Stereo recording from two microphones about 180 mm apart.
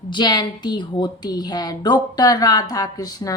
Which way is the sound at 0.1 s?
25° left (ahead or behind).